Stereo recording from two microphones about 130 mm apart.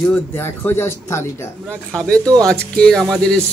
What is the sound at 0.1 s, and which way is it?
Speech, 15° left (ahead or behind).